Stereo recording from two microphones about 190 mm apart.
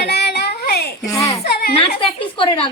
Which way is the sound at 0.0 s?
60° left (ahead or behind).